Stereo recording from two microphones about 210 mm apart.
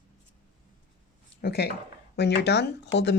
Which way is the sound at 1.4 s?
50° left (ahead or behind).